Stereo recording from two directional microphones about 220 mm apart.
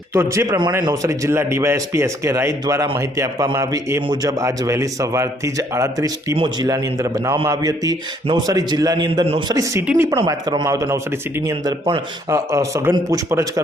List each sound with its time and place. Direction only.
0.1 s a man's voice: 10° right (ahead or behind)
9.6 s a man's voice: 10° right (ahead or behind)